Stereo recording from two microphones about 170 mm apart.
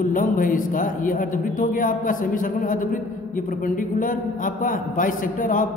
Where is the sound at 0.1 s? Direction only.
50° left (ahead or behind).